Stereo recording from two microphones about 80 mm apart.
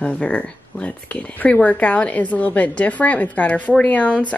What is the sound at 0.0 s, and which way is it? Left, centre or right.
A woman's voice, centre.